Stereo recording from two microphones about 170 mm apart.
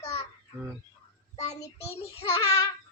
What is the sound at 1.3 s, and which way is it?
Speech, 20° left (ahead or behind).